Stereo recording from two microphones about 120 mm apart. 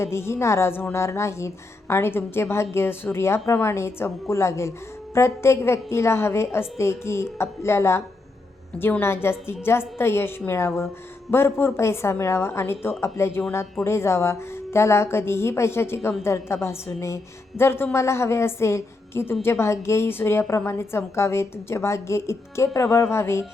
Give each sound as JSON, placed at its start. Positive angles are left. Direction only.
{"t": 0.0, "sound": "a woman's voice", "side_deg": 20}